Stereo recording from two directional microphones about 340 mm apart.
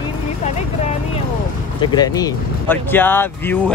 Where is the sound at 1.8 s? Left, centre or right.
Centre.